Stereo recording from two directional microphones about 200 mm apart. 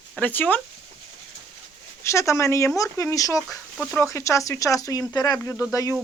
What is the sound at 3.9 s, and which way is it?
Speech, 15° left (ahead or behind).